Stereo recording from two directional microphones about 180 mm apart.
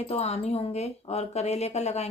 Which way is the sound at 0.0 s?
35° left (ahead or behind).